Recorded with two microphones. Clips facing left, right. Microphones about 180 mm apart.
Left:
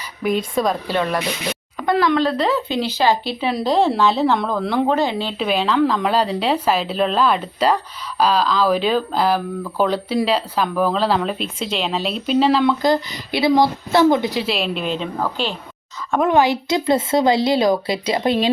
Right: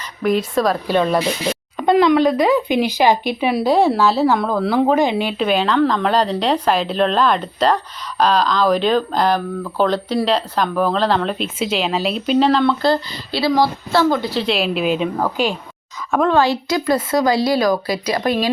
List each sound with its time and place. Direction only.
0.2 s a woman's voice: centre (ahead or behind)
0.9 s speech: 15° right (ahead or behind)
5.4 s speech: centre (ahead or behind); by 14.4 s 20° left (ahead or behind)
14.4 s speech: centre (ahead or behind)
16.3 s speech: 20° left (ahead or behind)